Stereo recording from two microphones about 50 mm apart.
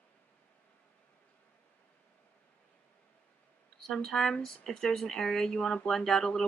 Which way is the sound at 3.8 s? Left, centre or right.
Centre.